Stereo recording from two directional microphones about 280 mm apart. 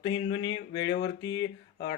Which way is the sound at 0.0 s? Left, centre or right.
Centre.